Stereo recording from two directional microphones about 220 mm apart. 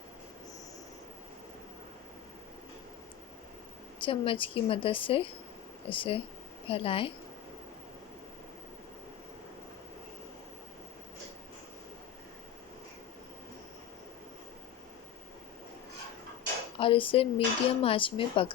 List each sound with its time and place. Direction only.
4.0 s speech: 25° left (ahead or behind)
16.7 s speech: 25° left (ahead or behind)